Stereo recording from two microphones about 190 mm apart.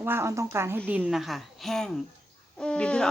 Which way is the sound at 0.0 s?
15° right (ahead or behind).